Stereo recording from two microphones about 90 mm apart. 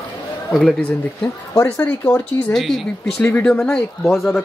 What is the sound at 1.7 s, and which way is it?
Speech, 20° left (ahead or behind).